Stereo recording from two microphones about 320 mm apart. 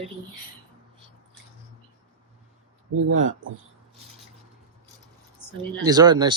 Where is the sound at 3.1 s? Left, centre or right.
Right.